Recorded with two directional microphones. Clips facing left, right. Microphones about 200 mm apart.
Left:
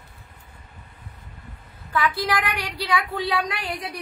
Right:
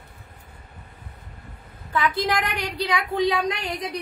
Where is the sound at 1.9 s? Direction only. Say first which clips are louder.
Even; 20° right (ahead or behind).